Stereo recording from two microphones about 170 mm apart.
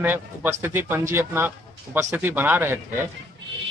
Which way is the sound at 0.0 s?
10° right (ahead or behind).